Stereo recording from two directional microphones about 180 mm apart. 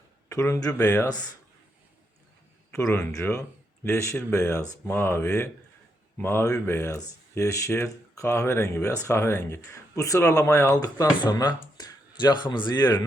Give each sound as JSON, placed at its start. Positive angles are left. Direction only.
{"t": 0.3, "sound": "speech", "side_deg": 20}
{"t": 0.8, "sound": "speech", "side_deg": 10}
{"t": 2.9, "sound": "speech", "side_deg": 15}